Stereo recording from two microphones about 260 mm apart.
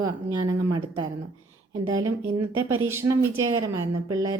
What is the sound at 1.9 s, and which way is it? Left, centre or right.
A woman's voice, centre.